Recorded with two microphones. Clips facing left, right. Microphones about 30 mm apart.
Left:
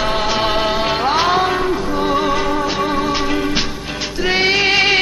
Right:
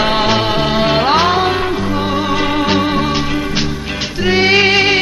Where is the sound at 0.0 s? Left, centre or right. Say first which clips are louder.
Right 4 dB; right.